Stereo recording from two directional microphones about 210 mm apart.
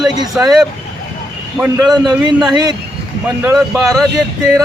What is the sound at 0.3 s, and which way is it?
A man's voice, centre (ahead or behind).